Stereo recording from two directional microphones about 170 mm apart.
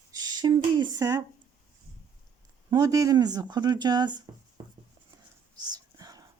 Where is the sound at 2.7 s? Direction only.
20° right (ahead or behind).